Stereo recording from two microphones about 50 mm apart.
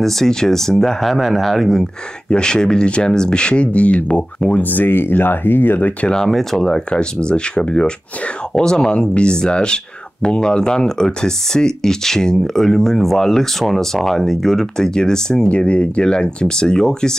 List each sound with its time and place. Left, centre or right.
0.0 s speech: centre
2.2 s speech: centre; by 5.9 s left
6.2 s speech: centre
6.6 s speech: centre
15.4 s speech: left